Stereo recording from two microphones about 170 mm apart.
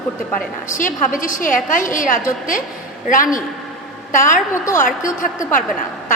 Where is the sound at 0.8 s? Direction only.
50° left (ahead or behind).